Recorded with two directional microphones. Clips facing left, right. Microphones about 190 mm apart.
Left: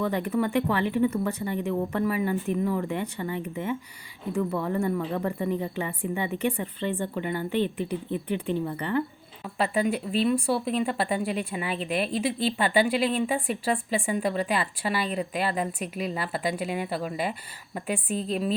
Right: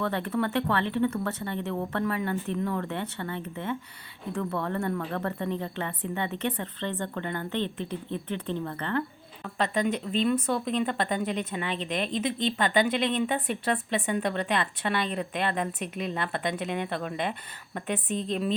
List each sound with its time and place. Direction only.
0.0 s a woman's voice: 10° left (ahead or behind)